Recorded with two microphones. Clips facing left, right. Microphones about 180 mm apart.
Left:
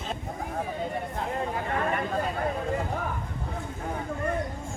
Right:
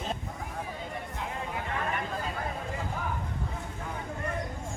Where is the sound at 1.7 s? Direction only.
40° left (ahead or behind).